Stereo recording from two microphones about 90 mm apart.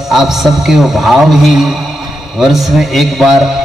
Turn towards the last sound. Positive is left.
turn(degrees=0)  # may be behind; listen again after turning